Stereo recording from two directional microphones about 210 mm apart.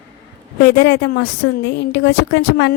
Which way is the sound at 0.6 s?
55° left (ahead or behind).